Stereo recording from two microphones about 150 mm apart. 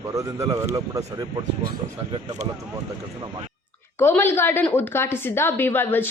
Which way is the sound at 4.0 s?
15° left (ahead or behind).